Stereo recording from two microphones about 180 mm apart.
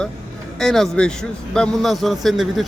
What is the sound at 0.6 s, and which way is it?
A man's voice, centre (ahead or behind).